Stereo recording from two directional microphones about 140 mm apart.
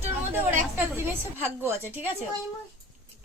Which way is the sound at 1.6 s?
15° right (ahead or behind).